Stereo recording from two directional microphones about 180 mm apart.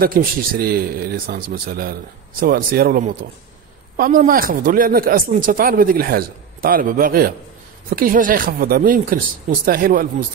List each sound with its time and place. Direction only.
0.0 s speech: 55° right (ahead or behind)